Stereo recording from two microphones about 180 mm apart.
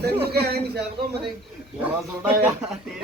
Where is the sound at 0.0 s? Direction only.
60° right (ahead or behind).